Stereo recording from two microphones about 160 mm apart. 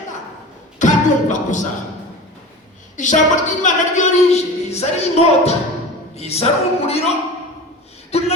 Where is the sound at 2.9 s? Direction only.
50° left (ahead or behind).